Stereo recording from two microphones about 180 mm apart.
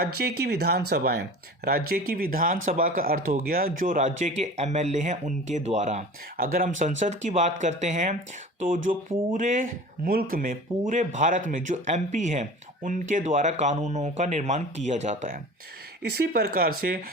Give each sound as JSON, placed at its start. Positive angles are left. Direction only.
{"t": 0.0, "sound": "speech", "side_deg": -60}
{"t": 16.0, "sound": "speech", "side_deg": -65}